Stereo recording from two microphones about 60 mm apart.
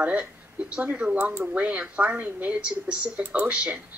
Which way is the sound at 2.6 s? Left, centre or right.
Centre.